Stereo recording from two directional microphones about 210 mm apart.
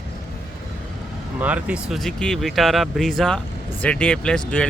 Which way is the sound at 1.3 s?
5° right (ahead or behind).